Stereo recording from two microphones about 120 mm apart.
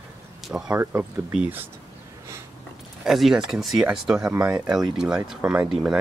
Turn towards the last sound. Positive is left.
turn(degrees=-10)  # may be behind; listen again after turning